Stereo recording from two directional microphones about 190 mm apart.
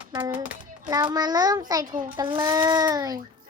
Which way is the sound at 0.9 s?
20° right (ahead or behind).